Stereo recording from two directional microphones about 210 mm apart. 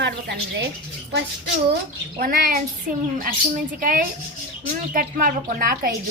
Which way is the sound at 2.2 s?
45° right (ahead or behind).